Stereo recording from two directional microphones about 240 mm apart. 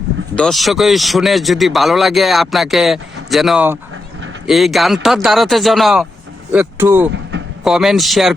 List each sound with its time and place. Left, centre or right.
0.3 s speech: centre
7.1 s vehicle: right
7.6 s speech: centre